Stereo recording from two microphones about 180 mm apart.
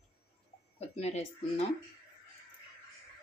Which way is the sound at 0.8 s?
35° left (ahead or behind).